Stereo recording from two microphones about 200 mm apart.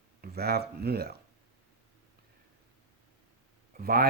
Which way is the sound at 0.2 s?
50° right (ahead or behind).